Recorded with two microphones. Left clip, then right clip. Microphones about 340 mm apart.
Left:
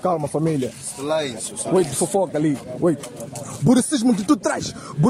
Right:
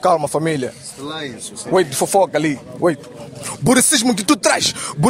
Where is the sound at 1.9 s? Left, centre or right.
Right.